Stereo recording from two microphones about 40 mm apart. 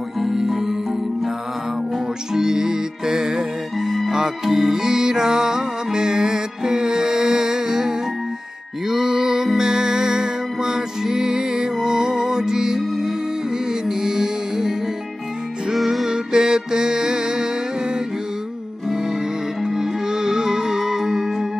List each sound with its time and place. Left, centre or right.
0.2 s music: centre
2.3 s music: centre
15.7 s music: centre
16.1 s music: centre
19.6 s music: centre